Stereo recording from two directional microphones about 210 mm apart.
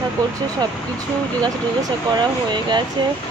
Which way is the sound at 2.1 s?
20° right (ahead or behind).